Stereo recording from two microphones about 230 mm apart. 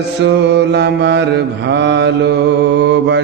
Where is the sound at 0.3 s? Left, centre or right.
Right.